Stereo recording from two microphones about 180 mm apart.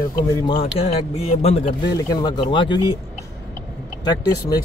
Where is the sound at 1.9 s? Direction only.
20° left (ahead or behind).